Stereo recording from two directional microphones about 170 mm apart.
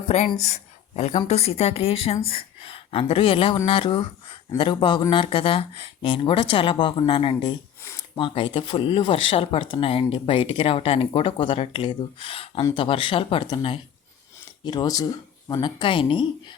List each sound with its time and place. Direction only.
0.3 s speech: 40° left (ahead or behind)